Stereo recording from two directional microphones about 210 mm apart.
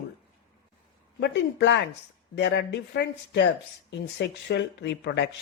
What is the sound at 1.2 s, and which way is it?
Speech, 55° left (ahead or behind).